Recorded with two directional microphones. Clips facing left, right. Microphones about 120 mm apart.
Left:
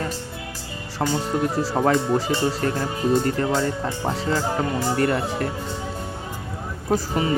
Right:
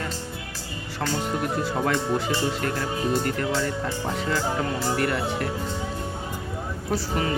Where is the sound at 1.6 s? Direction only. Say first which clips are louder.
Left 4 dB; 35° left (ahead or behind).